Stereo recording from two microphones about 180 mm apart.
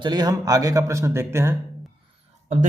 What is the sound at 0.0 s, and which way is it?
Speech, 25° right (ahead or behind).